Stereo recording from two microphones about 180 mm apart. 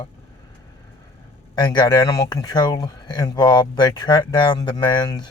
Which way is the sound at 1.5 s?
25° left (ahead or behind).